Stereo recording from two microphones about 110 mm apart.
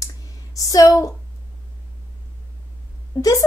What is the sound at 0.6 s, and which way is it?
Speech, 30° left (ahead or behind).